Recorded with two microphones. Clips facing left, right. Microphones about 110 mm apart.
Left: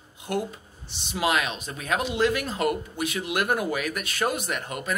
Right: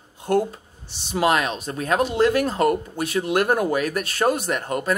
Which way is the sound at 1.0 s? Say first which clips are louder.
Right 5 dB; 45° right (ahead or behind).